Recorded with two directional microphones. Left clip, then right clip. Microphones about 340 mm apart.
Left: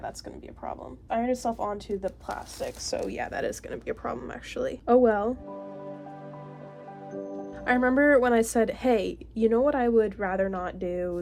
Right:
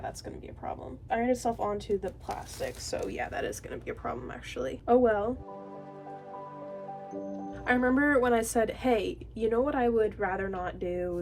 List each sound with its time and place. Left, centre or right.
0.6 s a woman's voice: centre
7.6 s a woman's voice: left